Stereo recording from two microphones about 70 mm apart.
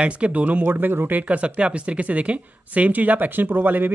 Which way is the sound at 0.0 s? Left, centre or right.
Centre.